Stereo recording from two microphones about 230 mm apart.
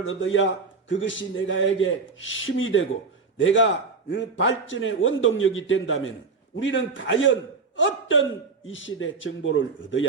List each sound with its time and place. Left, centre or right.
0.0 s a man's voice: left